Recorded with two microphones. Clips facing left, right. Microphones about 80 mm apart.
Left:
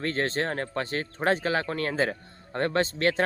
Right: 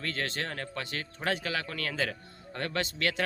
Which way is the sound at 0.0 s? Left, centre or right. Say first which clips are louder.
Left 7 dB; left.